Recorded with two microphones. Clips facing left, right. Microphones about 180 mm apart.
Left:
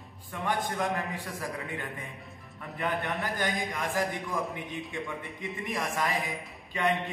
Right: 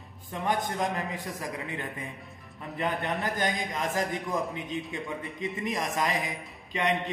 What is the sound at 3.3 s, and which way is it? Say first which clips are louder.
A man's voice: right 1 dB; 20° right (ahead or behind).